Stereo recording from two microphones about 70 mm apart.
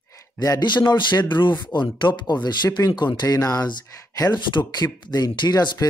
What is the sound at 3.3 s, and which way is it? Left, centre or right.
Speech, left.